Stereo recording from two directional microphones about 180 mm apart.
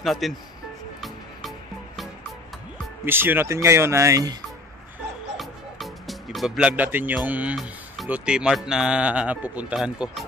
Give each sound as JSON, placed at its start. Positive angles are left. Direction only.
{"t": 0.0, "sound": "speech", "side_deg": 0}
{"t": 3.1, "sound": "speech", "side_deg": -10}
{"t": 5.4, "sound": "music", "side_deg": 0}
{"t": 7.2, "sound": "speech", "side_deg": -10}